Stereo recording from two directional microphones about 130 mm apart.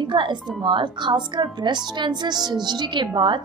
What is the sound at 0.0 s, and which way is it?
A woman's voice, 35° right (ahead or behind).